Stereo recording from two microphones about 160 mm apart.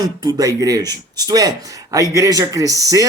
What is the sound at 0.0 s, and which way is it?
Speech, 25° right (ahead or behind).